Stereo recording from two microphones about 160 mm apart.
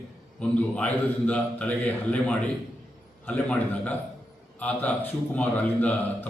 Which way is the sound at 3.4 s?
10° left (ahead or behind).